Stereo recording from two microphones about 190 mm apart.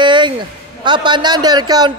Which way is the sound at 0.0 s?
25° right (ahead or behind).